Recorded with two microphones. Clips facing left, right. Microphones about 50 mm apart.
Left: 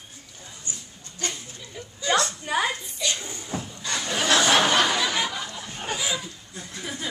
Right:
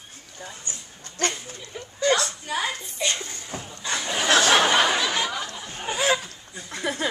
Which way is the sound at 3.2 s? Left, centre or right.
Left.